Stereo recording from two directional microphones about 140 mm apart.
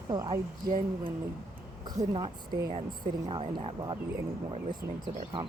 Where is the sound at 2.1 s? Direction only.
30° right (ahead or behind).